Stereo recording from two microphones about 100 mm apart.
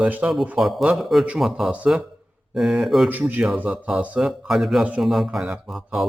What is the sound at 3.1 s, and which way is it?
A man's voice, 15° right (ahead or behind).